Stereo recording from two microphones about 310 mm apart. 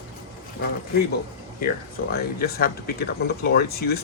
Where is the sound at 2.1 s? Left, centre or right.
Left.